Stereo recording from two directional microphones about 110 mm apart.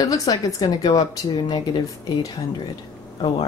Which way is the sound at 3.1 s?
45° left (ahead or behind).